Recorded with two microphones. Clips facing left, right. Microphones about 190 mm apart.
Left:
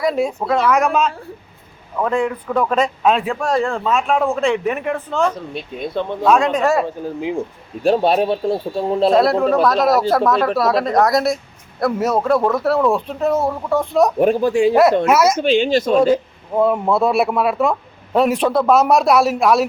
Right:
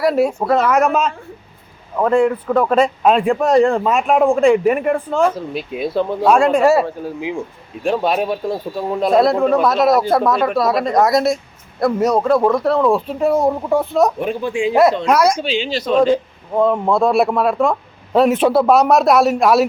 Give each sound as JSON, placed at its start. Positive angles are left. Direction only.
{"t": 0.0, "sound": "speech", "side_deg": -5}
{"t": 2.0, "sound": "speech", "side_deg": -5}
{"t": 3.4, "sound": "speech", "side_deg": -20}
{"t": 7.2, "sound": "speech", "side_deg": 45}
{"t": 7.9, "sound": "speech", "side_deg": 35}
{"t": 9.1, "sound": "speech", "side_deg": 0}
{"t": 13.1, "sound": "speech", "side_deg": -15}
{"t": 14.2, "sound": "speech", "side_deg": 40}
{"t": 15.0, "sound": "speech", "side_deg": 5}
{"t": 15.4, "sound": "speech", "side_deg": 50}
{"t": 16.0, "sound": "a man's voice", "side_deg": 10}
{"t": 18.4, "sound": "speech", "side_deg": -15}
{"t": 18.7, "sound": "speech", "side_deg": 0}